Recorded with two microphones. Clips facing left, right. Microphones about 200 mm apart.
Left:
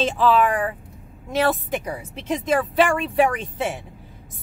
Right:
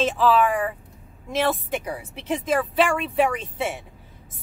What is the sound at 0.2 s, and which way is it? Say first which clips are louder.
Speech: left 2 dB; centre (ahead or behind).